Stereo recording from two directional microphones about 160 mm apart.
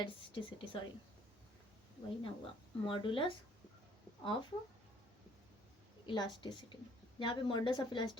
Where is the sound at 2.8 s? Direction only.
35° left (ahead or behind).